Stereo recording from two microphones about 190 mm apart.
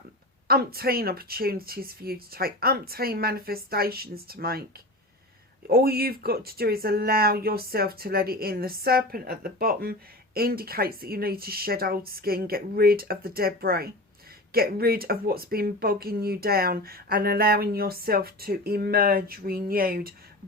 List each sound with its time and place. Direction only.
0.4 s speech: 55° right (ahead or behind)
5.6 s speech: 55° right (ahead or behind)